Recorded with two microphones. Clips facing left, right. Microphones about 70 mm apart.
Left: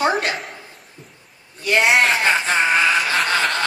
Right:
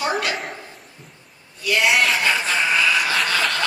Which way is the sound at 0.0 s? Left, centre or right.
Left.